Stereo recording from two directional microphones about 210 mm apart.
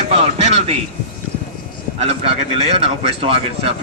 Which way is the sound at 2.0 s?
30° right (ahead or behind).